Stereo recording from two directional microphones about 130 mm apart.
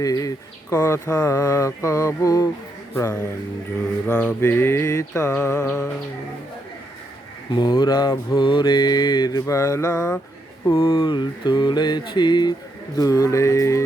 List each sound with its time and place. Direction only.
0.0 s speech: 30° left (ahead or behind)
4.0 s speech: 10° left (ahead or behind)
5.6 s music: 5° left (ahead or behind)
7.5 s mantra: 35° left (ahead or behind)
10.8 s mantra: 40° left (ahead or behind)
13.0 s speech: 25° left (ahead or behind)